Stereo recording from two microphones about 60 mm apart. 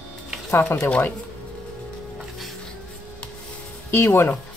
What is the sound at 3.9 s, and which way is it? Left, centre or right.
Speech, left.